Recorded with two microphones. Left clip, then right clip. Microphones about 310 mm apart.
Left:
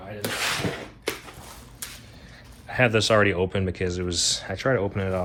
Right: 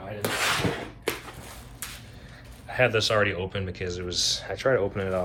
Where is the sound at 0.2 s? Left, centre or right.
Centre.